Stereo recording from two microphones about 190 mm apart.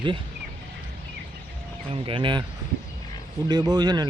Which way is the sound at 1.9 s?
25° right (ahead or behind).